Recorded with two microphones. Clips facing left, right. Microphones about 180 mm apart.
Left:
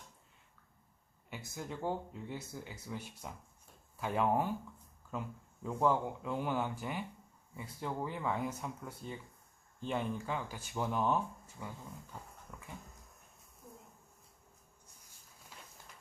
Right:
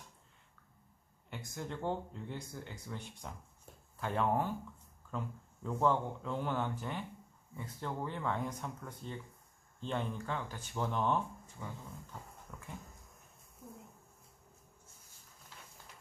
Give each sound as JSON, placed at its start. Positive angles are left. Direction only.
{"t": 1.3, "sound": "speech", "side_deg": 5}
{"t": 5.6, "sound": "speech", "side_deg": 10}
{"t": 12.5, "sound": "dog", "side_deg": 0}
{"t": 13.6, "sound": "a sound", "side_deg": -50}